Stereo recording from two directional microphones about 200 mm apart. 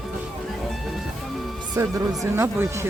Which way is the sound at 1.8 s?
15° right (ahead or behind).